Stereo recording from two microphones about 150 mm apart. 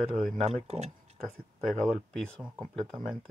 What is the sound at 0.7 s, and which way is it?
Speech, 45° right (ahead or behind).